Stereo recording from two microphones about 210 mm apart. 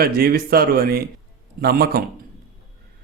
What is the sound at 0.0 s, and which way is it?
A man's voice, 45° right (ahead or behind).